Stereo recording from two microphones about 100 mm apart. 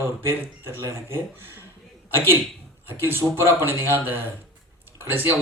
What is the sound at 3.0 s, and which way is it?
Speech, 25° right (ahead or behind).